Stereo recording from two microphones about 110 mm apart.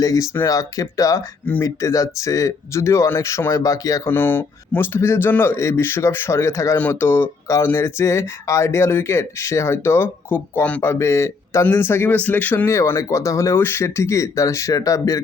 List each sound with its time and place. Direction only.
0.0 s speech: 30° left (ahead or behind)
1.5 s speech: 20° left (ahead or behind)
1.8 s speech: 30° left (ahead or behind)
4.1 s speech: 20° left (ahead or behind)
12.6 s speech: 25° left (ahead or behind)